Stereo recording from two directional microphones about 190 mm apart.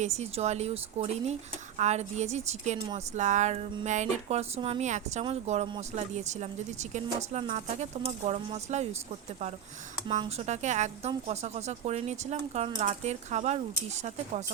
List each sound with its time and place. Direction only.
0.0 s speech: 35° right (ahead or behind)
10.2 s speech: 35° right (ahead or behind)